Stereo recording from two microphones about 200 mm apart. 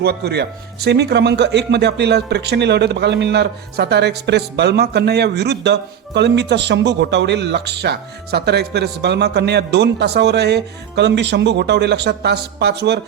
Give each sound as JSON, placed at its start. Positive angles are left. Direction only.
{"t": 0.0, "sound": "speech", "side_deg": -55}